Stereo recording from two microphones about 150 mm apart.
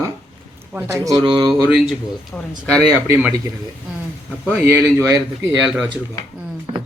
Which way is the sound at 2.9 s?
15° right (ahead or behind).